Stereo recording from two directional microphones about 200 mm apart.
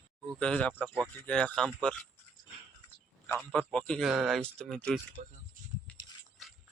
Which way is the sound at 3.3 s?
5° left (ahead or behind).